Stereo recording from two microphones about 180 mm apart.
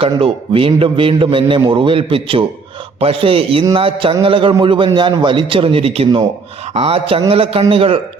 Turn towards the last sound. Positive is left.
turn(degrees=-30)  # may be behind; listen again after turning